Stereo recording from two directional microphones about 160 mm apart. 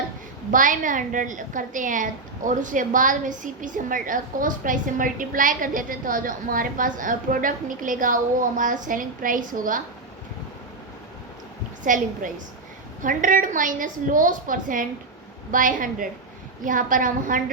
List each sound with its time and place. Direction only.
0.5 s a woman's voice: 55° right (ahead or behind)
11.9 s a woman's voice: 55° right (ahead or behind)